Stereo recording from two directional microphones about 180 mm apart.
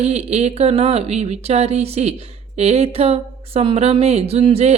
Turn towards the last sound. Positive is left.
turn(degrees=-35)  # may be behind; listen again after turning